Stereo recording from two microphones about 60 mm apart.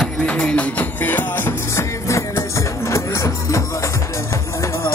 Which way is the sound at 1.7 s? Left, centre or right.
Left.